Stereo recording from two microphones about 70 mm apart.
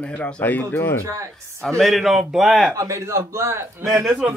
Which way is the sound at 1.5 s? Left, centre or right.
Centre.